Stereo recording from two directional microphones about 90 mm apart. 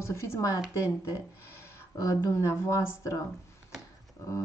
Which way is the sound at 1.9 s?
35° left (ahead or behind).